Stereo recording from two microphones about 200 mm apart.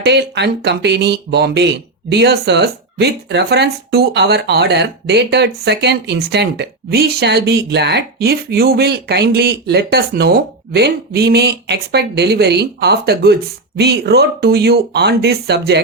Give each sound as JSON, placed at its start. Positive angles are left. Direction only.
{"t": 0.0, "sound": "a woman's voice", "side_deg": -60}